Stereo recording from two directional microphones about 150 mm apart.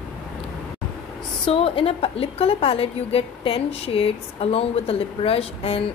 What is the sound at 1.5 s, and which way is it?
A woman's voice, 40° left (ahead or behind).